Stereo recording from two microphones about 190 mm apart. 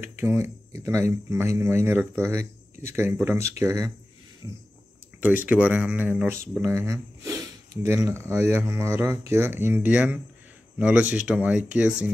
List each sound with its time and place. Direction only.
0.0 s speech: 10° right (ahead or behind)
4.4 s a sound: 20° right (ahead or behind)
5.2 s speech: 10° right (ahead or behind)